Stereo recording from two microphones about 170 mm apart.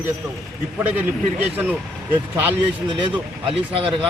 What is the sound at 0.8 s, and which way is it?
Speech, 10° right (ahead or behind).